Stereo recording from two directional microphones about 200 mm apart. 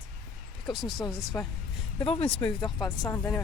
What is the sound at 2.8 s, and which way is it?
Speech, 10° left (ahead or behind).